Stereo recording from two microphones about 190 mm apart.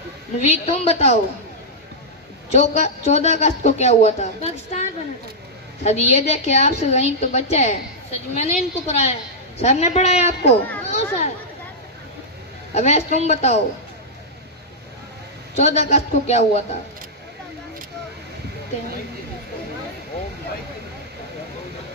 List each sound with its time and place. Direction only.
0.4 s a man's voice: 35° left (ahead or behind)
2.5 s a man's voice: 35° left (ahead or behind)
12.7 s a man's voice: 35° left (ahead or behind)
15.5 s a man's voice: 35° left (ahead or behind)